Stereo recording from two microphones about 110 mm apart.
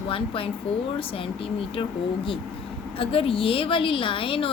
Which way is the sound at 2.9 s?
60° left (ahead or behind).